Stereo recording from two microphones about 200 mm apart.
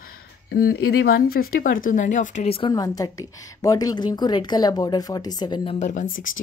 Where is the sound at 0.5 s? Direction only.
50° left (ahead or behind); by 2.7 s 30° left (ahead or behind).